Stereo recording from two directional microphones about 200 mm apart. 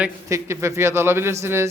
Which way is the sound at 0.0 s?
15° right (ahead or behind).